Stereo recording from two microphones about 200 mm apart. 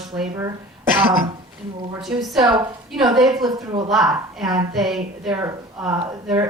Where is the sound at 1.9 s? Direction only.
Centre (ahead or behind).